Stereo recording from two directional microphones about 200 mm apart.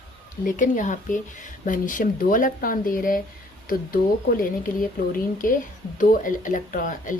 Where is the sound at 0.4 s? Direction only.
40° left (ahead or behind).